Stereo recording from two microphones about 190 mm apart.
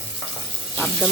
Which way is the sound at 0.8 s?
5° left (ahead or behind).